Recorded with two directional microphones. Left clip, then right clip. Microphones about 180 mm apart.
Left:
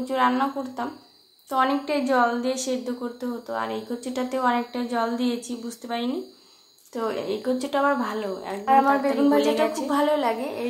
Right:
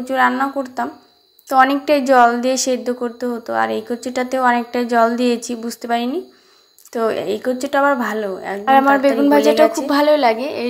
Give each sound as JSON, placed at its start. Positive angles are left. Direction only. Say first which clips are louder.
{"t": 0.0, "sound": "a woman's voice", "louder": "right 6 dB", "side_deg": -25}